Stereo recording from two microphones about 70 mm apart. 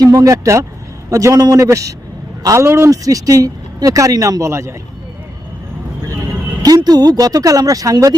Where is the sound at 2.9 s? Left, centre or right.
Right.